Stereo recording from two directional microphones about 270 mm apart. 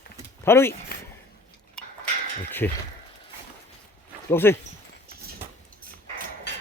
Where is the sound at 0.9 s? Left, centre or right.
Left.